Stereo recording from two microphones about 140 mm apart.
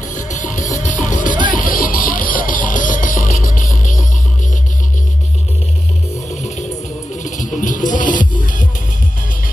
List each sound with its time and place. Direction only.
0.1 s music: 65° left (ahead or behind)
7.2 s music: 65° left (ahead or behind)